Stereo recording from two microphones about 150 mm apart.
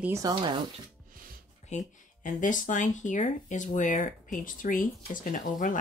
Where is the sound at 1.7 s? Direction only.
50° left (ahead or behind).